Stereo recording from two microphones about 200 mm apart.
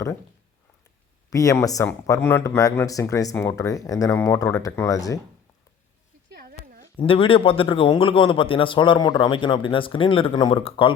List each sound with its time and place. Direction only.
1.3 s speech: 15° left (ahead or behind)
6.4 s a sound: 50° right (ahead or behind)
6.9 s a man's voice: 25° left (ahead or behind)